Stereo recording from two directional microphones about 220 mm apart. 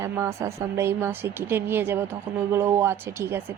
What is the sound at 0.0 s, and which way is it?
Speech, 15° right (ahead or behind).